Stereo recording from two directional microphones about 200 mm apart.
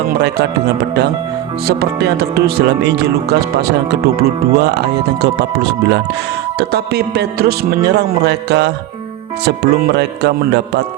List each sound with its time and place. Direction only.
0.1 s speech: 55° right (ahead or behind)